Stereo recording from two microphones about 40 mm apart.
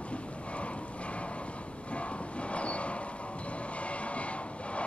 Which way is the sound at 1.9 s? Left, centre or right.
Left.